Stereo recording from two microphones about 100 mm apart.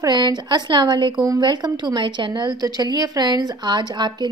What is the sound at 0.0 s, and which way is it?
A woman's voice, 45° right (ahead or behind).